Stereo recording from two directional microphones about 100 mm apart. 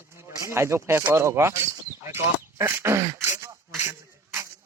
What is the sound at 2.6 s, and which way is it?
Throat clearing, 25° right (ahead or behind).